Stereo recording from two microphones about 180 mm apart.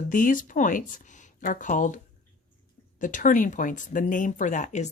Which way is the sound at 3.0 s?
45° left (ahead or behind).